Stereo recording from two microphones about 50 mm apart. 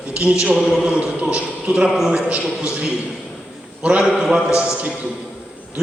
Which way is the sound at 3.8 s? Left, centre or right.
Centre.